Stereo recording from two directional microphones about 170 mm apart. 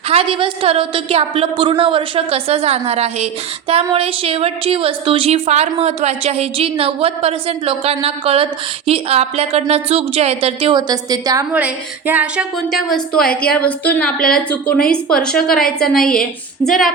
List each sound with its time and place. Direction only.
0.1 s a woman's voice: 30° right (ahead or behind)
11.5 s a woman's voice: 10° right (ahead or behind)